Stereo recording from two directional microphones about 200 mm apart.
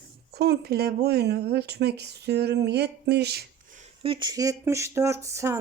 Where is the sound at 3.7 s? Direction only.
25° right (ahead or behind).